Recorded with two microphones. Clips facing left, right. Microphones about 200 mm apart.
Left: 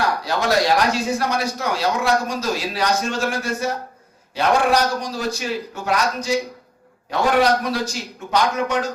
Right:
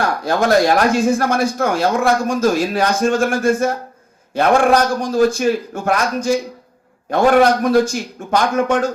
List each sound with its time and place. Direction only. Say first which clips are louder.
0.3 s speech: right 6 dB; 50° right (ahead or behind)